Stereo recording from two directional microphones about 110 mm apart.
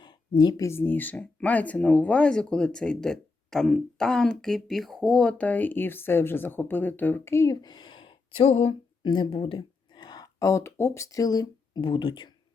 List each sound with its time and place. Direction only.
0.0 s a sound: 40° left (ahead or behind)
0.6 s speech: 20° left (ahead or behind); by 8.7 s 65° left (ahead or behind)
9.0 s speech: 50° left (ahead or behind)